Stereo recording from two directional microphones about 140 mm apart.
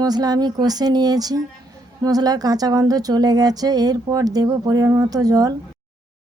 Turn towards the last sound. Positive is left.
turn(degrees=-25)  # may be behind; listen again after turning